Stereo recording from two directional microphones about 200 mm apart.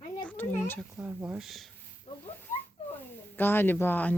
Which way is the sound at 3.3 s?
10° left (ahead or behind).